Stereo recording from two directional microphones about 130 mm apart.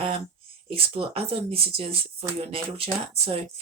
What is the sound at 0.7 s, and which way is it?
Speech, 45° right (ahead or behind).